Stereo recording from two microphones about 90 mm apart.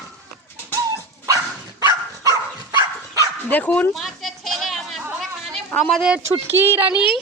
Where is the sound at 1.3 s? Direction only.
45° right (ahead or behind).